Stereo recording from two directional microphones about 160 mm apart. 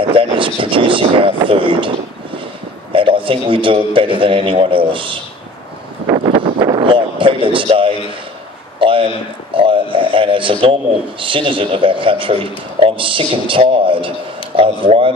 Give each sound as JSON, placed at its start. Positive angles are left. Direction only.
{"t": 0.1, "sound": "a man's voice", "side_deg": -35}
{"t": 2.9, "sound": "a man's voice", "side_deg": -35}
{"t": 6.0, "sound": "a sound", "side_deg": -35}
{"t": 8.7, "sound": "a man's voice", "side_deg": -35}